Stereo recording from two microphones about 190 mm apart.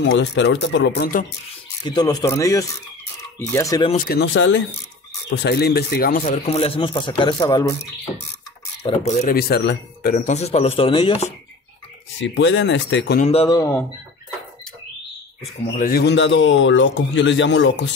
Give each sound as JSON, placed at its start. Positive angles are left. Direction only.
{"t": 0.1, "sound": "a man's voice", "side_deg": 70}
{"t": 1.9, "sound": "speech", "side_deg": 20}
{"t": 3.9, "sound": "speech", "side_deg": 45}
{"t": 4.2, "sound": "speech", "side_deg": 85}
{"t": 5.3, "sound": "speech", "side_deg": 65}
{"t": 6.4, "sound": "speech", "side_deg": 30}
{"t": 8.8, "sound": "speech", "side_deg": 20}
{"t": 9.3, "sound": "speech", "side_deg": 55}
{"t": 10.1, "sound": "speech", "side_deg": 35}
{"t": 12.2, "sound": "a man's voice", "side_deg": 75}
{"t": 13.2, "sound": "speech", "side_deg": 30}
{"t": 13.5, "sound": "speech", "side_deg": 15}
{"t": 15.7, "sound": "a man's voice", "side_deg": 50}